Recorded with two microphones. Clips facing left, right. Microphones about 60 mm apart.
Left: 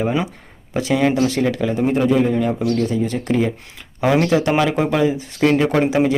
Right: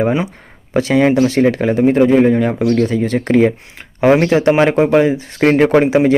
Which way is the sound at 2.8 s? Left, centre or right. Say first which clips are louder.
Right 4 dB; right.